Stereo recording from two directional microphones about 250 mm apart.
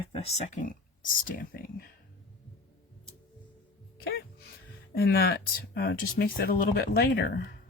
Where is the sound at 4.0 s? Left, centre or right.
Left.